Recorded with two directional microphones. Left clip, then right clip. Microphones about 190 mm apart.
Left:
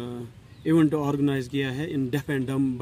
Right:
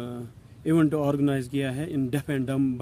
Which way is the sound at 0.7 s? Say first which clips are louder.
Left 1 dB; 15° right (ahead or behind).